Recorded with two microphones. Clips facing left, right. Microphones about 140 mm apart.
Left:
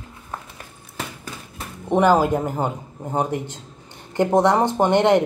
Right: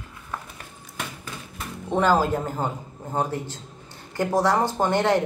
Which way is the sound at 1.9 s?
15° left (ahead or behind).